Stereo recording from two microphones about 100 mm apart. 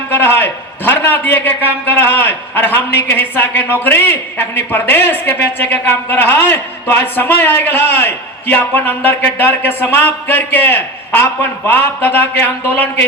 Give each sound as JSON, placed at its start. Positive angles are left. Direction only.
{"t": 0.1, "sound": "a man's voice", "side_deg": 20}